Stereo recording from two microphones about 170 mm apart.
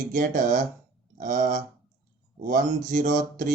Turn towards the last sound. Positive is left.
turn(degrees=-50)  # may be behind; listen again after turning